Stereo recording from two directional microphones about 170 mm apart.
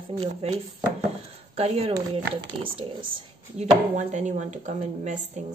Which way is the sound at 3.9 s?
45° right (ahead or behind).